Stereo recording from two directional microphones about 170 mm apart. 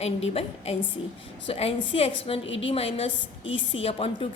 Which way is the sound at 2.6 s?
35° left (ahead or behind).